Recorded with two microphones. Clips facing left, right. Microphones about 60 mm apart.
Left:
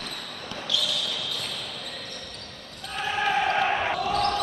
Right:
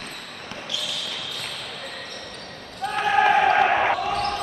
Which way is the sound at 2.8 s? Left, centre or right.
Right.